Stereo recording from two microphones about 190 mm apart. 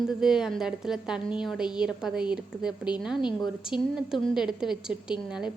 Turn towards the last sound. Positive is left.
turn(degrees=-5)  # may be behind; listen again after turning